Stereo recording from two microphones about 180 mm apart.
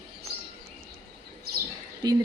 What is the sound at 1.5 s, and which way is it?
Chirp, 55° right (ahead or behind).